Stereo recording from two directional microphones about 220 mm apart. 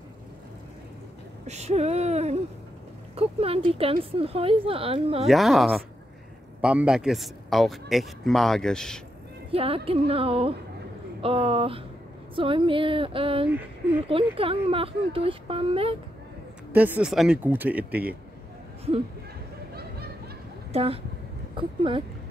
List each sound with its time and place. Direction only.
1.5 s speech: 30° right (ahead or behind)
5.2 s a man's voice: centre (ahead or behind)
9.5 s speech: 25° right (ahead or behind)
13.5 s speech: 10° right (ahead or behind)
14.0 s speech: 25° right (ahead or behind)
16.7 s speech: 5° right (ahead or behind)
19.7 s a sound: 45° right (ahead or behind)
20.7 s speech: 25° right (ahead or behind)